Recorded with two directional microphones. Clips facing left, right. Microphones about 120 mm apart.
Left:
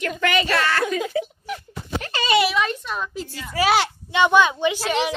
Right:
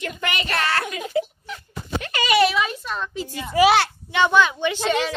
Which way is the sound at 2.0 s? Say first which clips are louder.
Even; 30° left (ahead or behind).